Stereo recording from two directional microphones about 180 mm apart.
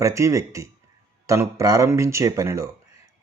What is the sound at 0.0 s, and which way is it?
Speech, 15° right (ahead or behind).